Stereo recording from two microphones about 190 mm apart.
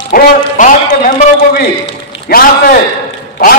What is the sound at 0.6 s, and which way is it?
A man's voice, 45° left (ahead or behind).